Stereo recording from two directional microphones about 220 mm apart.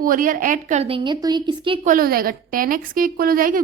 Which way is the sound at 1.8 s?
40° right (ahead or behind).